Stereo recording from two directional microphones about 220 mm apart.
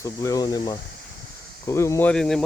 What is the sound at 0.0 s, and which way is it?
Speech, 15° left (ahead or behind).